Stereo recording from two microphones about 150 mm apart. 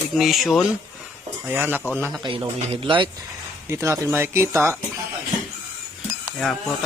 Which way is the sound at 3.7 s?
20° right (ahead or behind).